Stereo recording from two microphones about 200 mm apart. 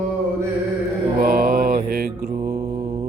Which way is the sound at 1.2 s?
45° right (ahead or behind).